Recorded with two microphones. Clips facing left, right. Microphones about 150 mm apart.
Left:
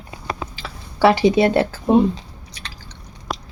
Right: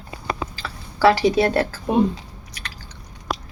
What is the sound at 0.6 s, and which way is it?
Speech, 25° left (ahead or behind).